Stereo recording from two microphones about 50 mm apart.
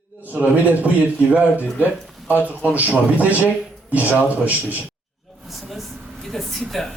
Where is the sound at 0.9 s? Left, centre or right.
Right.